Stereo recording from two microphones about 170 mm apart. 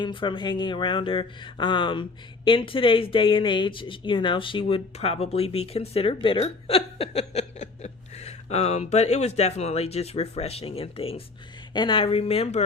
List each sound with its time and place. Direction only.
0.0 s speech: 30° left (ahead or behind)